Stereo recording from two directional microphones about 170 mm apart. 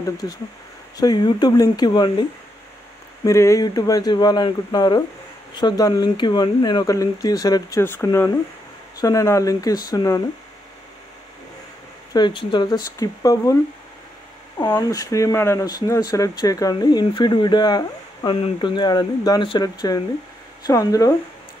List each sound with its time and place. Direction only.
0.9 s speech: 25° left (ahead or behind)
3.3 s speech: 15° left (ahead or behind)
12.1 s speech: 25° left (ahead or behind)
14.7 s speech: 20° left (ahead or behind)